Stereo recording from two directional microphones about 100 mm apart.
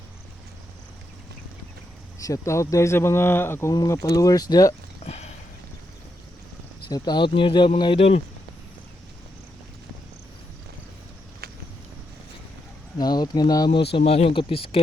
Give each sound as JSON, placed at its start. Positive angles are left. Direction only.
{"t": 2.1, "sound": "speech", "side_deg": 35}
{"t": 5.0, "sound": "a sound", "side_deg": 90}
{"t": 6.8, "sound": "speech", "side_deg": 45}
{"t": 7.9, "sound": "speech", "side_deg": 90}
{"t": 13.0, "sound": "speech", "side_deg": 45}
{"t": 14.0, "sound": "speech", "side_deg": 85}